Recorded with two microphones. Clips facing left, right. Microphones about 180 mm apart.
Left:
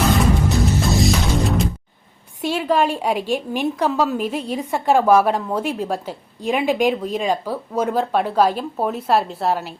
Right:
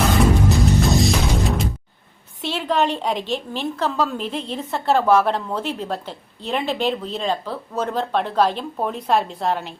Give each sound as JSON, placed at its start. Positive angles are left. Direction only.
{"t": 0.5, "sound": "music", "side_deg": 0}
{"t": 2.4, "sound": "a woman's voice", "side_deg": 10}